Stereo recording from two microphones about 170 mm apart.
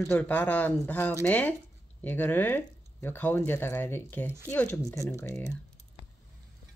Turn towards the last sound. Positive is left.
turn(degrees=10)  # may be behind; listen again after turning